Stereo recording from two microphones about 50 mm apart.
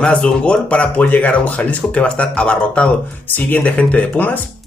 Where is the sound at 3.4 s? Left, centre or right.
Left.